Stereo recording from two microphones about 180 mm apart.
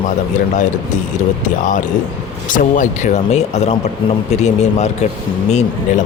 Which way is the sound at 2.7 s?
45° left (ahead or behind).